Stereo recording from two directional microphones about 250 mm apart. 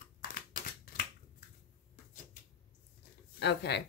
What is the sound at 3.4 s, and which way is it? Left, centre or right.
Speech, left.